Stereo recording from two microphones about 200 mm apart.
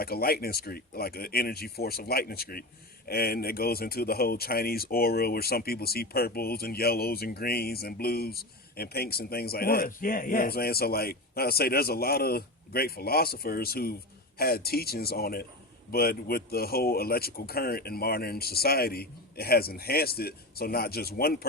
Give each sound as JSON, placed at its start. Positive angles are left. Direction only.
{"t": 0.0, "sound": "speech", "side_deg": 50}